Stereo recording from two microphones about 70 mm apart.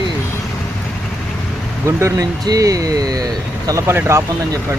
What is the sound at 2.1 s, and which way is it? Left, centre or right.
Speech, right.